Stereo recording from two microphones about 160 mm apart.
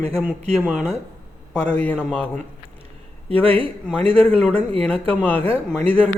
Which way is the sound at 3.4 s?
35° right (ahead or behind).